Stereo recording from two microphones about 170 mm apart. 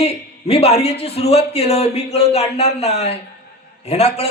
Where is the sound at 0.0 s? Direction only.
35° left (ahead or behind).